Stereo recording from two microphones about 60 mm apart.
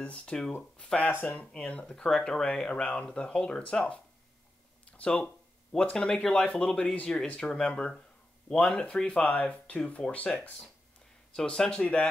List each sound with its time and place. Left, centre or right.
0.0 s speech: centre
1.1 s speech: left
2.0 s speech: centre